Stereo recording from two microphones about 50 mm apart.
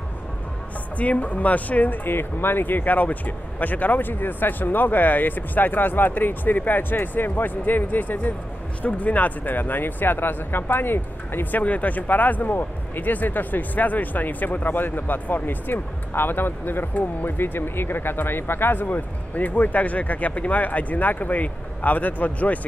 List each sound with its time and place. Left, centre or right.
0.9 s speech: left
11.6 s speech: left